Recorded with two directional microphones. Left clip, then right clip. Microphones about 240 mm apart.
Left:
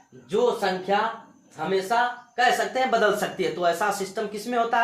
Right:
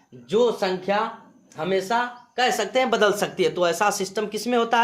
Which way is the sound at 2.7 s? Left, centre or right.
Right.